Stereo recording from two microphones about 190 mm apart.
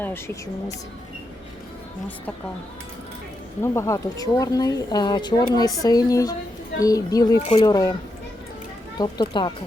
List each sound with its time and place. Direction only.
3.6 s speech: 15° left (ahead or behind)
9.0 s speech: 25° left (ahead or behind)